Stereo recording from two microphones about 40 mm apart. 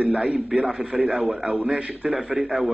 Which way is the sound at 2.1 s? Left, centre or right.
Centre.